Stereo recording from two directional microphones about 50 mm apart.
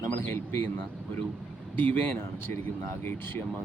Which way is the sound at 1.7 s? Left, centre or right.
Left.